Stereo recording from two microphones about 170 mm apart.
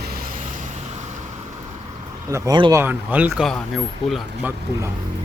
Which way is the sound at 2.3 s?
20° right (ahead or behind).